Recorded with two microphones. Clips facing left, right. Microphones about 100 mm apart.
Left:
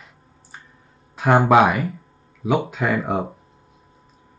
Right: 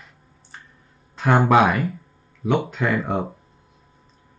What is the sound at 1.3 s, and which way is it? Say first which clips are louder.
Speech: left 2 dB; 10° left (ahead or behind).